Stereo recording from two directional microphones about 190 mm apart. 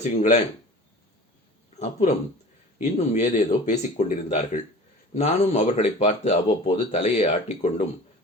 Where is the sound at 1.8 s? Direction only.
35° left (ahead or behind).